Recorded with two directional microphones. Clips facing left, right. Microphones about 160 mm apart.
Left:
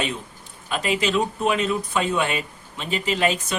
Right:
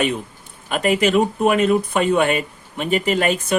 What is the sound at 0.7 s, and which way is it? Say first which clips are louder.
Speech: right 6 dB; 55° right (ahead or behind).